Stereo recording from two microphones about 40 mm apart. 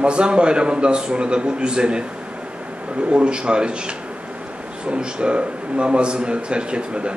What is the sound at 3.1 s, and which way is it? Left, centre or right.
A man's voice, right.